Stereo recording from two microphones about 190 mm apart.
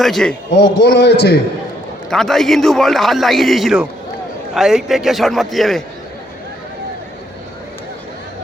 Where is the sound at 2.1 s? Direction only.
Centre (ahead or behind).